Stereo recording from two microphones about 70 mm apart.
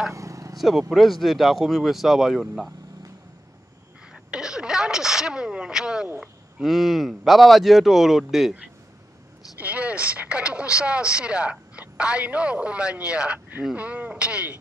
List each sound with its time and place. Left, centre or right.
0.1 s vehicle: right
0.6 s speech: centre
4.1 s a sound: centre
6.6 s speech: centre
9.6 s speech: centre